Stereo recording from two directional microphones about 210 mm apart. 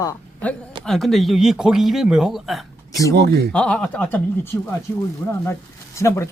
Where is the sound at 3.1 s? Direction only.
50° right (ahead or behind).